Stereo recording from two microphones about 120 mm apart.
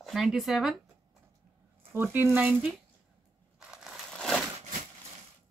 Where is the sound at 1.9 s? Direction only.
20° right (ahead or behind).